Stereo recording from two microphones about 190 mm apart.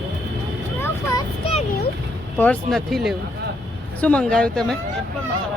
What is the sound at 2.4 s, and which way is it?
Speech, 5° left (ahead or behind).